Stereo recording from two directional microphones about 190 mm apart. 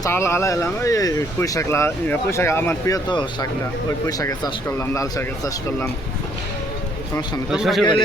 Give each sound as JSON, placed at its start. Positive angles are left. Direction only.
{"t": 0.0, "sound": "speech", "side_deg": 15}
{"t": 7.5, "sound": "speech", "side_deg": 0}